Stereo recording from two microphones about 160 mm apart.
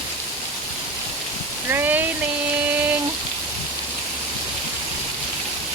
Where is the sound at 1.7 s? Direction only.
10° right (ahead or behind).